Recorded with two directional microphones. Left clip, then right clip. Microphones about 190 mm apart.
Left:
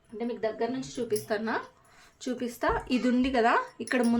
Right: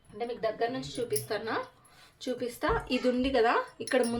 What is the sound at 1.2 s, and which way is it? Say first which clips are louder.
Speech: left 2 dB; 40° left (ahead or behind).